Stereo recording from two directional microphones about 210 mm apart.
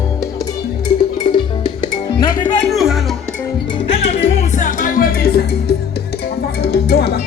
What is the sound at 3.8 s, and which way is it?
Music, 30° left (ahead or behind).